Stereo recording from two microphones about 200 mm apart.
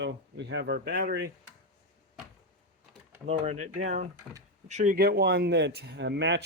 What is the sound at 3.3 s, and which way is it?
Speech, 35° right (ahead or behind).